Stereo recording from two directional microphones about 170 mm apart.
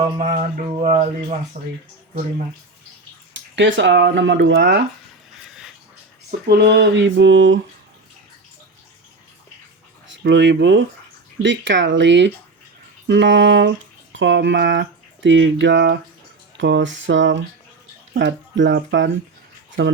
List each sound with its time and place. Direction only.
0.0 s speech: 45° right (ahead or behind)
3.5 s speech: 90° right
6.5 s speech: 75° right (ahead or behind)
10.2 s speech: 90° right